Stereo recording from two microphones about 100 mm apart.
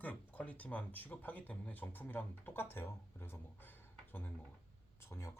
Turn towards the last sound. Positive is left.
turn(degrees=30)  # may be behind; listen again after turning